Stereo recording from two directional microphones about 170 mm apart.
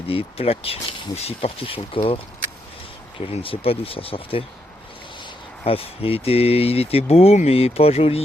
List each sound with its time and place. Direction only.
0.1 s speech: 35° left (ahead or behind)
3.4 s speech: 35° left (ahead or behind)
5.6 s speech: 35° left (ahead or behind)